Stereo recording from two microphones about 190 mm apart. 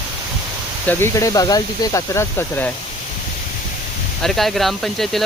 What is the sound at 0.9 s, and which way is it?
Speech, 15° left (ahead or behind).